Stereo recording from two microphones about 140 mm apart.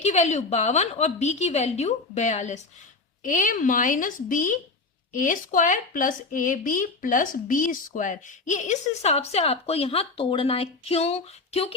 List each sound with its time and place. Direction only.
0.0 s a woman's voice: 55° left (ahead or behind)
3.2 s a woman's voice: 70° left (ahead or behind); by 11.7 s 45° left (ahead or behind)